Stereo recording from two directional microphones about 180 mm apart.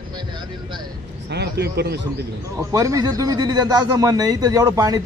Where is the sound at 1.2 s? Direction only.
65° right (ahead or behind).